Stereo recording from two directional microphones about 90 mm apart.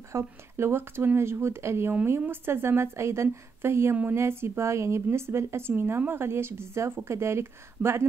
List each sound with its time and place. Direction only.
0.1 s a woman's voice: 30° right (ahead or behind)